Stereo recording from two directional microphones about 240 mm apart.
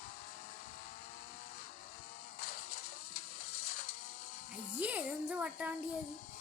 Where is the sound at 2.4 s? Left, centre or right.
Left.